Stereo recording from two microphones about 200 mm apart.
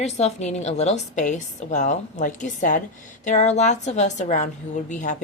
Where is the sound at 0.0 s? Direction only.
35° left (ahead or behind).